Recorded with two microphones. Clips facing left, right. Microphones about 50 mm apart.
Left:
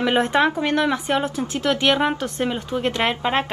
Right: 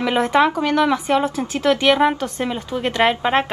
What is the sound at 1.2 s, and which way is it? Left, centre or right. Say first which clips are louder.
Speech: right 4 dB; right.